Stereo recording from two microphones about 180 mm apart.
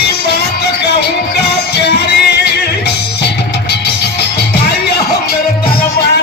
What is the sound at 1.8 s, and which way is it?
Music, 65° left (ahead or behind).